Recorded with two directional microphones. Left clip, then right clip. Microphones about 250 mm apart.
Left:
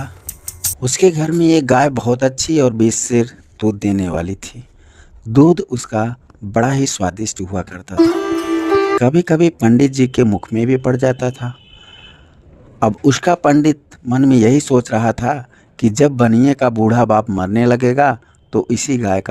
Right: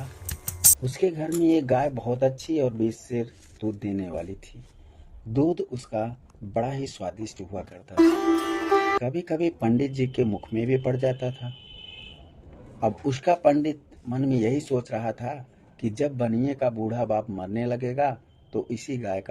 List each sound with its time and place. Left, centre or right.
0.4 s typing: centre
0.8 s speech: left
8.1 s music: centre
8.5 s music: centre
9.0 s speech: left
12.8 s speech: left